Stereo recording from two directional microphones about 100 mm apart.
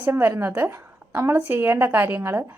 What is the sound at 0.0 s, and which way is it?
A woman's voice, 20° right (ahead or behind).